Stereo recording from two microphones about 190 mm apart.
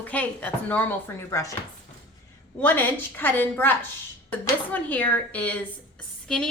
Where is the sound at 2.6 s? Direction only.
10° left (ahead or behind).